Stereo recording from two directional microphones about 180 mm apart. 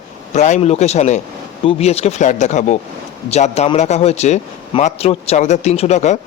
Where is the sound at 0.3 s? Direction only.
40° left (ahead or behind).